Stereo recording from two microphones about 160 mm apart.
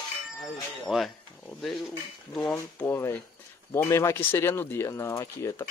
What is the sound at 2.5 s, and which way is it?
Speech, 15° left (ahead or behind).